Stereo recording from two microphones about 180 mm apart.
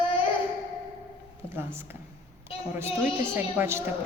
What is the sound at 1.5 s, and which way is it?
Speech, 15° right (ahead or behind).